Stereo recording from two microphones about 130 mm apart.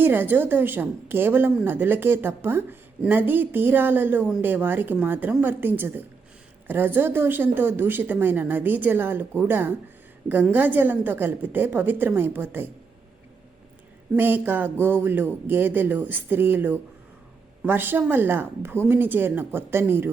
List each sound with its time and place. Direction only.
0.0 s a woman's voice: 15° right (ahead or behind)
14.2 s a woman's voice: 15° right (ahead or behind)